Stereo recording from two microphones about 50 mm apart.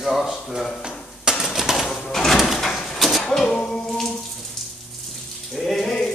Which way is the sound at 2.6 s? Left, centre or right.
Centre.